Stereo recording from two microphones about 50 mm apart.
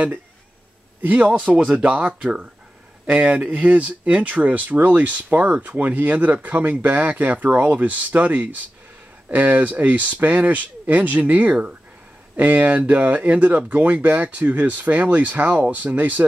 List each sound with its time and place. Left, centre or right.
1.0 s speech: right